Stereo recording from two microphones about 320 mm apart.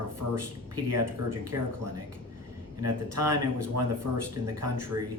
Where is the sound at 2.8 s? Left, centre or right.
Right.